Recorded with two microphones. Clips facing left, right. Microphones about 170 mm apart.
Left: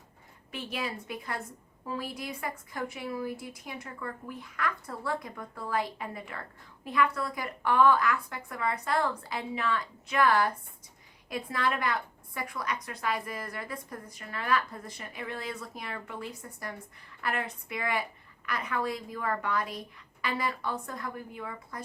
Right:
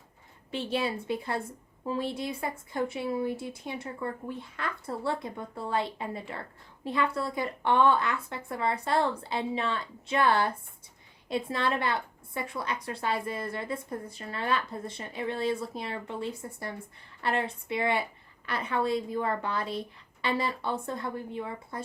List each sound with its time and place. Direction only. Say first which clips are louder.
0.5 s a woman's voice: right 6 dB; 30° right (ahead or behind)